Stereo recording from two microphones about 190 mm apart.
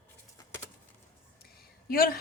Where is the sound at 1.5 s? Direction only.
50° left (ahead or behind).